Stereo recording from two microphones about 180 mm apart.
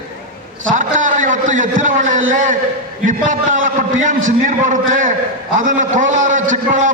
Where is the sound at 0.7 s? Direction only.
45° right (ahead or behind).